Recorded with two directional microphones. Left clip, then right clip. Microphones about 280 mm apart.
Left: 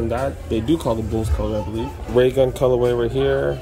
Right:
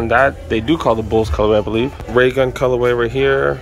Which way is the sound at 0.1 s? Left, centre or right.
Centre.